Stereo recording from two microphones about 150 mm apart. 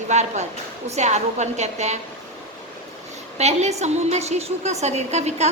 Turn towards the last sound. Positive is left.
turn(degrees=-45)  # may be behind; listen again after turning